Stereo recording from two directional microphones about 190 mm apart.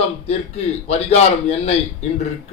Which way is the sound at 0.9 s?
35° left (ahead or behind).